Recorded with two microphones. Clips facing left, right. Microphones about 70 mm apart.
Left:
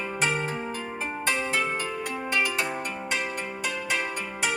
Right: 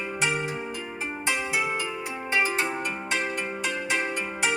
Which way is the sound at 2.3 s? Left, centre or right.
Right.